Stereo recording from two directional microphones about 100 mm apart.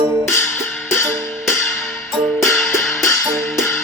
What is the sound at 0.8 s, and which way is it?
Music, 25° left (ahead or behind).